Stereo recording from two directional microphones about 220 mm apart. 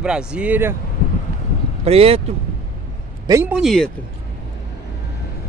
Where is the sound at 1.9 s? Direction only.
25° right (ahead or behind).